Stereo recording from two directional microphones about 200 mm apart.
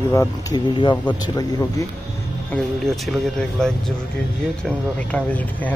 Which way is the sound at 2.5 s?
Centre (ahead or behind).